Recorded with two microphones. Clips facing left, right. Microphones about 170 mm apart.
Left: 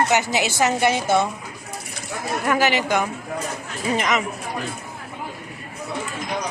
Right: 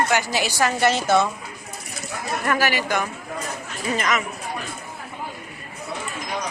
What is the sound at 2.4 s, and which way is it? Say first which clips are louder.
A woman's voice: left 3 dB; 15° left (ahead or behind).